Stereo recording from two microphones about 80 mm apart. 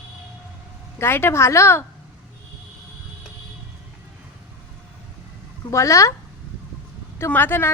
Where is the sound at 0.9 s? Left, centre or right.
Left.